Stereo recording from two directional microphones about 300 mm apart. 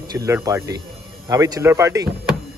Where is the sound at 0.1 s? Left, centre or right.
Centre.